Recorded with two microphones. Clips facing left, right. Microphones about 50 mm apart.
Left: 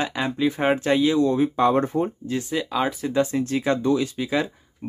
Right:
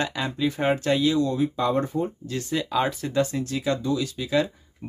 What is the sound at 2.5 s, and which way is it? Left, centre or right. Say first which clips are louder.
Speech: right 1 dB; centre.